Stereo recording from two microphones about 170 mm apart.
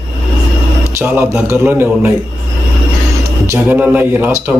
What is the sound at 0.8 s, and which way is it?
Speech, 15° right (ahead or behind).